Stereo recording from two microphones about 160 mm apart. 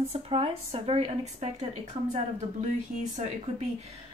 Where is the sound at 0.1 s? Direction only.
40° right (ahead or behind).